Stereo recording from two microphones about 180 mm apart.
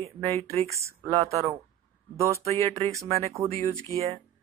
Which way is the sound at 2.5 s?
15° left (ahead or behind).